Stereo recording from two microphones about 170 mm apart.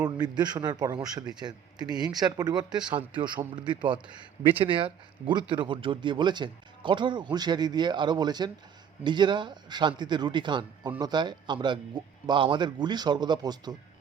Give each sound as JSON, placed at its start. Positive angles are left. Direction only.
{"t": 0.0, "sound": "speech", "side_deg": -25}